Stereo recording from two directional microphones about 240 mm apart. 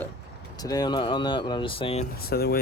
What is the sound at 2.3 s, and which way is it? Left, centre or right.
Speech, left.